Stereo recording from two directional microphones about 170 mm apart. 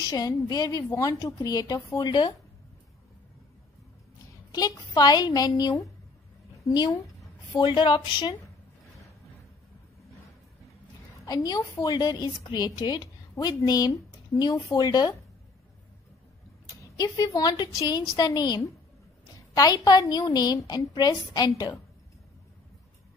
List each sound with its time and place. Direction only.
0.1 s a woman's voice: 20° left (ahead or behind)
4.5 s a woman's voice: 20° left (ahead or behind)
11.2 s a woman's voice: 25° left (ahead or behind)
16.6 s a woman's voice: 20° left (ahead or behind)